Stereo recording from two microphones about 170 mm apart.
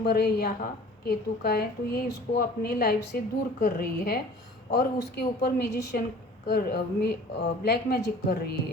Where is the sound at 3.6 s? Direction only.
65° left (ahead or behind).